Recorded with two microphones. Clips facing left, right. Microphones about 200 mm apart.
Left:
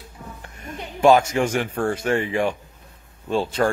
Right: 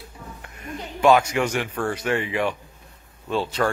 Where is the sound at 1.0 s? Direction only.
45° left (ahead or behind).